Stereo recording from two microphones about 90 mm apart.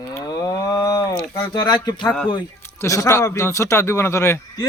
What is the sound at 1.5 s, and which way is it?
Speech, 55° left (ahead or behind).